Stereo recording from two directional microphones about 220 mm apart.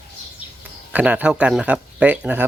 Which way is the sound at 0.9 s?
5° right (ahead or behind).